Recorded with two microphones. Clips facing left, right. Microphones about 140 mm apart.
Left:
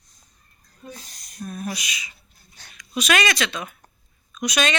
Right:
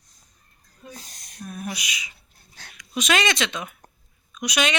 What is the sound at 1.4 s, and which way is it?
Speech, 10° right (ahead or behind).